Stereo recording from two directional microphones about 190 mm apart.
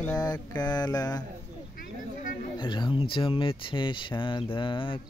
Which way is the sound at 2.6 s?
25° left (ahead or behind).